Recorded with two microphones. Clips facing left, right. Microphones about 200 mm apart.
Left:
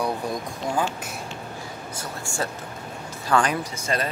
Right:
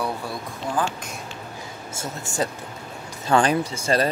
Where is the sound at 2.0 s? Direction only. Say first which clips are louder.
Right 4 dB; 20° right (ahead or behind).